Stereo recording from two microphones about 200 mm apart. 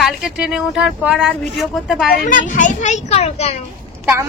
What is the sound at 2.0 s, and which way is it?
A child's voice, 45° left (ahead or behind).